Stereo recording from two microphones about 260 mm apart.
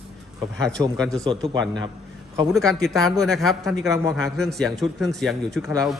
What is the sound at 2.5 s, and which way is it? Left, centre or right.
A man's voice, centre.